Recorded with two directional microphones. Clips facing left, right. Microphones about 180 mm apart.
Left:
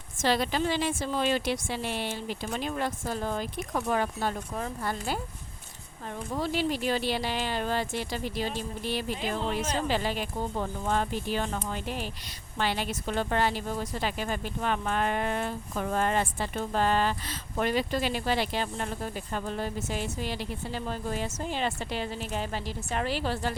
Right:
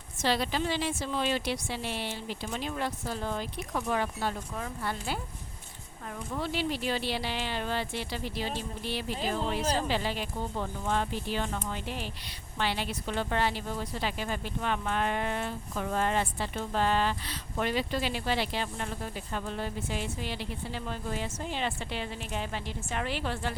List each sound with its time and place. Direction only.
0.2 s speech: 50° left (ahead or behind)
6.3 s speech: 40° left (ahead or behind)